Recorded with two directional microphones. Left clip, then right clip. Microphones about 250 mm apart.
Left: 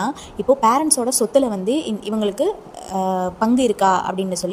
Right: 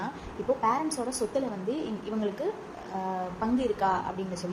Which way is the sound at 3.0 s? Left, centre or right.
Left.